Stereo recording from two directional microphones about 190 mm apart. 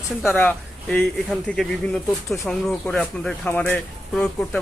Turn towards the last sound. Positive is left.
turn(degrees=5)  # may be behind; listen again after turning